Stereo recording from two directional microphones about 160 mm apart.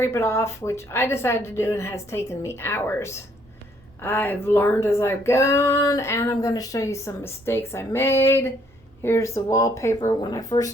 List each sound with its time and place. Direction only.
0.0 s speech: 15° left (ahead or behind)